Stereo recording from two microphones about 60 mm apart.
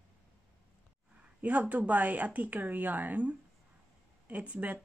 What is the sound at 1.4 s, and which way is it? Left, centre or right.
Speech, right.